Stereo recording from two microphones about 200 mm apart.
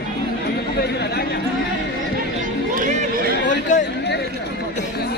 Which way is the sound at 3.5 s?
40° left (ahead or behind).